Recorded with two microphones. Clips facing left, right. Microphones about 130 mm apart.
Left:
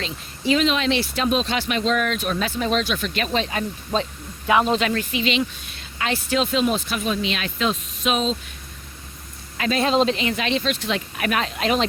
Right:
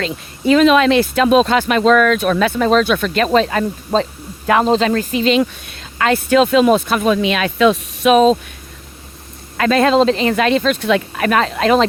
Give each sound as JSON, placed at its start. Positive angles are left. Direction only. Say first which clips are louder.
{"t": 0.0, "sound": "speech", "louder": "right 7 dB", "side_deg": -50}
{"t": 2.6, "sound": "speech", "louder": "right 8 dB", "side_deg": -45}
{"t": 5.4, "sound": "speech", "louder": "right 8 dB", "side_deg": -55}
{"t": 8.1, "sound": "speech", "louder": "right 13 dB", "side_deg": -55}
{"t": 9.6, "sound": "a man's voice", "louder": "right 8 dB", "side_deg": -55}
{"t": 9.9, "sound": "speech", "louder": "right 7 dB", "side_deg": -40}
{"t": 10.3, "sound": "speech", "louder": "right 9 dB", "side_deg": -50}
{"t": 11.2, "sound": "speech", "louder": "right 8 dB", "side_deg": -40}